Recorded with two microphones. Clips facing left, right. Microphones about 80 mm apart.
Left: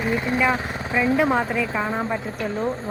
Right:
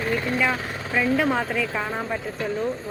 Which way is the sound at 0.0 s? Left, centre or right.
Centre.